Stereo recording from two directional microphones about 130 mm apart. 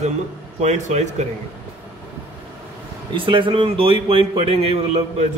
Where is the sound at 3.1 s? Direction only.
40° right (ahead or behind).